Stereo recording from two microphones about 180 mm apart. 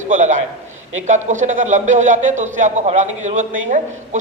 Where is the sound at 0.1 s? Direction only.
45° right (ahead or behind).